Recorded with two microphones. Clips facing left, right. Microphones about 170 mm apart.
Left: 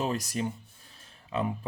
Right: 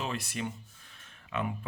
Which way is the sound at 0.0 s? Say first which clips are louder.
Left 5 dB; 40° left (ahead or behind).